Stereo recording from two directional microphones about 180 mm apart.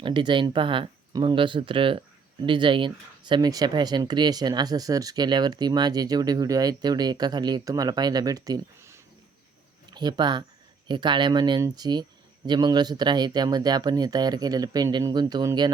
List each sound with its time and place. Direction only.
0.0 s speech: 25° right (ahead or behind)